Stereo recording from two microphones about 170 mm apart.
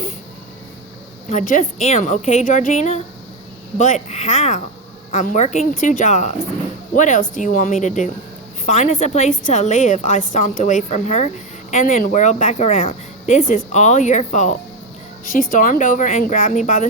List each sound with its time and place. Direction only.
1.3 s speech: 50° left (ahead or behind)